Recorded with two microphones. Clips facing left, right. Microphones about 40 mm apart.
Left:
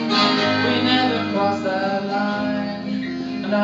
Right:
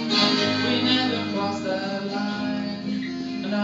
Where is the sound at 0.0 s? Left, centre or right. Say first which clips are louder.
Left 4 dB; centre.